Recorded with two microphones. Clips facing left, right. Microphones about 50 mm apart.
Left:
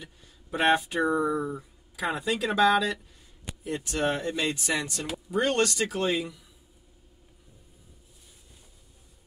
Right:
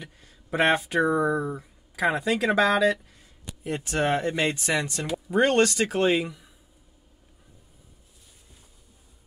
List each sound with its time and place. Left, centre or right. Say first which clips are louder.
0.0 s a sound: right 3 dB; right
0.7 s speech: right 3 dB; right
2.1 s speech: right 2 dB; right
2.6 s speech: left 2 dB; right